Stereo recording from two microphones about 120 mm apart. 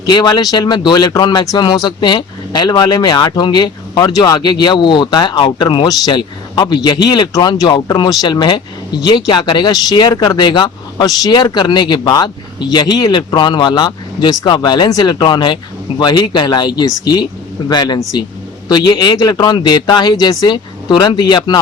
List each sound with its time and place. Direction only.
0.0 s speech: 35° left (ahead or behind)